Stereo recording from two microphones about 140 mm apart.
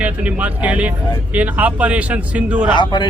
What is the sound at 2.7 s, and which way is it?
Speech, 35° left (ahead or behind).